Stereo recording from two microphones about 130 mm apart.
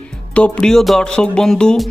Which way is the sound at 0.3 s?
10° left (ahead or behind).